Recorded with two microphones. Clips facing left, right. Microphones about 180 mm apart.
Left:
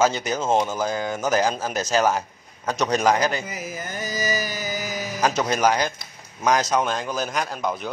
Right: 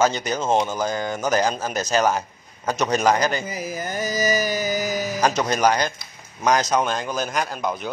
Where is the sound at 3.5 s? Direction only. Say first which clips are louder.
Right 4 dB; 35° right (ahead or behind).